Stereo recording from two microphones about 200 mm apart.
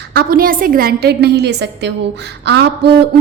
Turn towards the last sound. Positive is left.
turn(degrees=-60)  # may be behind; listen again after turning